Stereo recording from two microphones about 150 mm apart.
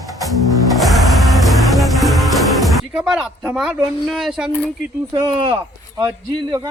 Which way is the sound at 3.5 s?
5° right (ahead or behind).